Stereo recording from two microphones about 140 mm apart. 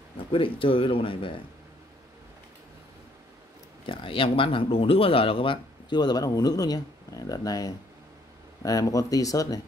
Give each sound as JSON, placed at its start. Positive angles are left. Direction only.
{"t": 0.3, "sound": "speech", "side_deg": 40}
{"t": 3.8, "sound": "speech", "side_deg": 40}